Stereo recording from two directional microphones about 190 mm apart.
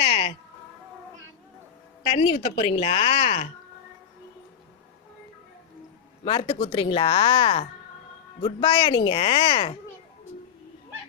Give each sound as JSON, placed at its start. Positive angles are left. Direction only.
{"t": 0.0, "sound": "a sound", "side_deg": 30}
{"t": 2.0, "sound": "a woman's voice", "side_deg": 30}
{"t": 6.2, "sound": "speech", "side_deg": 30}